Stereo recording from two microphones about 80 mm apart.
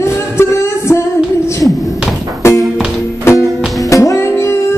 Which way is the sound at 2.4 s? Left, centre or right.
Left.